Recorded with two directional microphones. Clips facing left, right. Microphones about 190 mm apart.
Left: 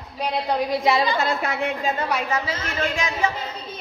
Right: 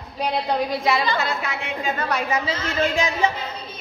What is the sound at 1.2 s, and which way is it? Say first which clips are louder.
Speech: left 3 dB; 50° left (ahead or behind).